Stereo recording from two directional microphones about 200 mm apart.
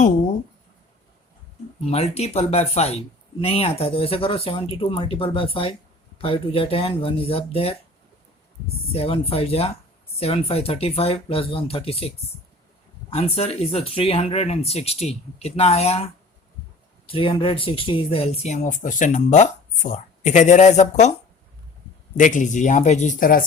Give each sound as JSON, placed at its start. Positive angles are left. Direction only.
{"t": 1.8, "sound": "speech", "side_deg": 30}
{"t": 8.9, "sound": "speech", "side_deg": 30}
{"t": 13.1, "sound": "speech", "side_deg": 30}
{"t": 17.1, "sound": "speech", "side_deg": 25}
{"t": 22.2, "sound": "speech", "side_deg": 40}